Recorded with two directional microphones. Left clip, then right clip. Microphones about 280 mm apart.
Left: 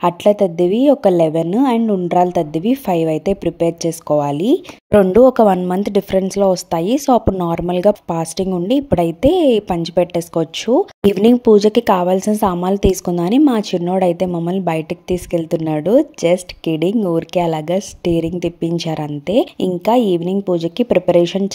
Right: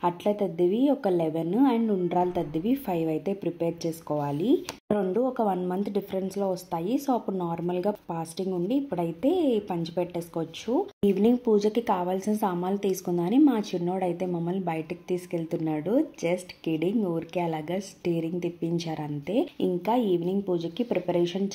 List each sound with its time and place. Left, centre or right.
0.0 s a woman's voice: left